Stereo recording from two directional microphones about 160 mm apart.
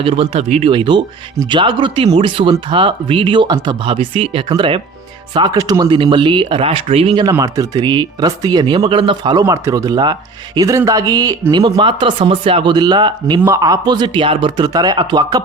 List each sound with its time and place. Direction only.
0.0 s speech: 35° right (ahead or behind)
0.7 s speech: 30° right (ahead or behind)
7.3 s speech: 20° right (ahead or behind)